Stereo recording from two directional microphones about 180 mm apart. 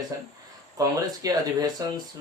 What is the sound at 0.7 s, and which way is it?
Speech, 20° right (ahead or behind).